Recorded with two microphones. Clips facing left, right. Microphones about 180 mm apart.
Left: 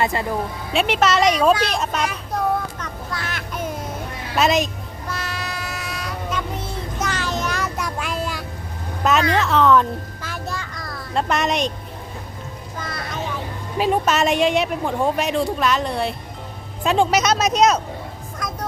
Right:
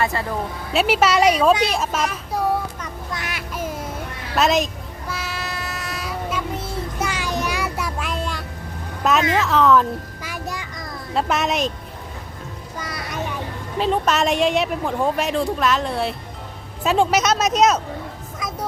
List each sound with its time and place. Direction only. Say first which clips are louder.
0.0 s speech: left 1 dB; 20° left (ahead or behind)
0.7 s a woman's voice: right 1 dB; 5° right (ahead or behind)
3.1 s a sound: even; 15° right (ahead or behind)
4.4 s music: even; centre (ahead or behind)
9.3 s a woman's voice: even; centre (ahead or behind)
10.2 s a sound: even; 10° right (ahead or behind)
11.1 s a woman's voice: even; 5° right (ahead or behind)
12.8 s a sound: left 1 dB; 10° right (ahead or behind)
13.7 s a woman's voice: left 1 dB; 10° left (ahead or behind)